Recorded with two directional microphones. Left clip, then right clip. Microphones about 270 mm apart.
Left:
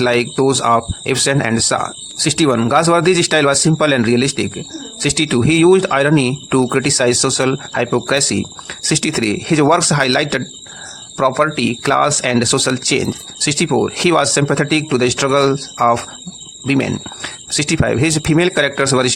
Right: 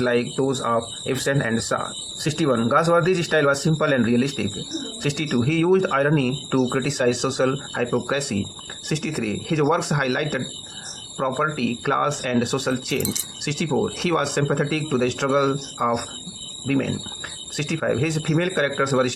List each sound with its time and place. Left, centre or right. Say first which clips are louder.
0.0 s speech: left 7 dB; left